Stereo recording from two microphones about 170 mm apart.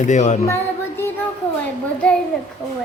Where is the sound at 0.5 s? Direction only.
15° left (ahead or behind).